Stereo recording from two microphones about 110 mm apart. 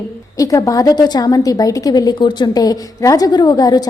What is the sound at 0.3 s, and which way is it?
A woman's voice, 30° left (ahead or behind).